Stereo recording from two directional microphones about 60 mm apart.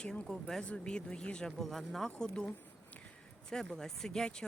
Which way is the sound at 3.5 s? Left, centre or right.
Centre.